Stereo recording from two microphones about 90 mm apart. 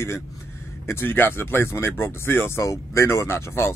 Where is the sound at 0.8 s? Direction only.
25° left (ahead or behind).